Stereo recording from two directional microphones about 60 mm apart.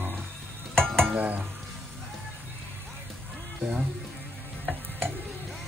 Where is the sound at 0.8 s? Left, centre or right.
Centre.